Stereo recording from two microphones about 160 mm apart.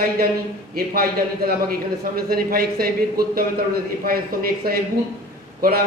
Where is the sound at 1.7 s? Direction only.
70° right (ahead or behind).